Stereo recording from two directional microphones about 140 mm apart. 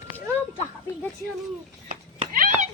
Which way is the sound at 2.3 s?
70° right (ahead or behind).